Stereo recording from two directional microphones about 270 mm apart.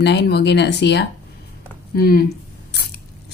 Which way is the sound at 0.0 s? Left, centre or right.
Left.